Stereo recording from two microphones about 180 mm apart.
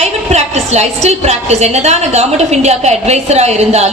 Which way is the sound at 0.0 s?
35° right (ahead or behind).